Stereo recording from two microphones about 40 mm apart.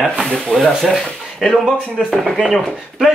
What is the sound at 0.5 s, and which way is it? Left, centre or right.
Speech, left.